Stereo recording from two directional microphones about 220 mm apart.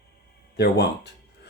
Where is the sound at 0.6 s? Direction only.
50° left (ahead or behind).